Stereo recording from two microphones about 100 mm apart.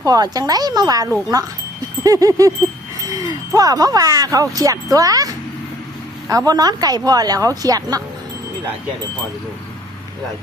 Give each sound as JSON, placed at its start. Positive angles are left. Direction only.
{"t": 0.0, "sound": "speech", "side_deg": -40}
{"t": 2.0, "sound": "speech", "side_deg": -35}